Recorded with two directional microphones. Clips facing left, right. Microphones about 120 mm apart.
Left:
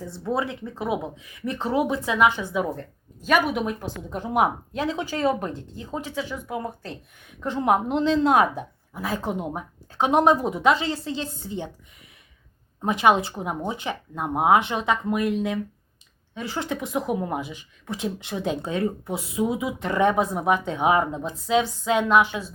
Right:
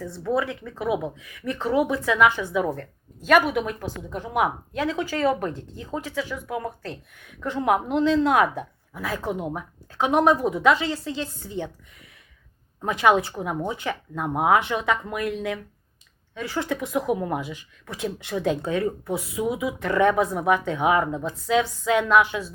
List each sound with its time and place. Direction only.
0.0 s a woman's voice: 25° left (ahead or behind)